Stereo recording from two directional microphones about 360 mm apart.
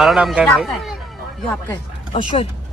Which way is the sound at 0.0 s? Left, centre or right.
Centre.